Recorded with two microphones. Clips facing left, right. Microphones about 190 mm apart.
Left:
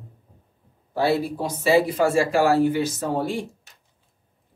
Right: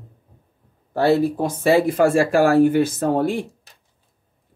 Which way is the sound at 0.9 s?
55° right (ahead or behind).